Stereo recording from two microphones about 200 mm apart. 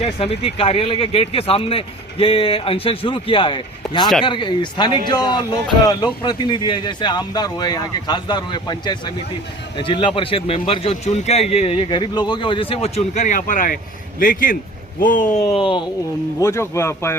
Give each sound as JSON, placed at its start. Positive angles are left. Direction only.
{"t": 0.2, "sound": "a man's voice", "side_deg": 30}
{"t": 16.4, "sound": "speech", "side_deg": 15}